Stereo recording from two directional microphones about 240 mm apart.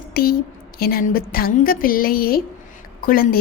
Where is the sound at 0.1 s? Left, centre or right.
Left.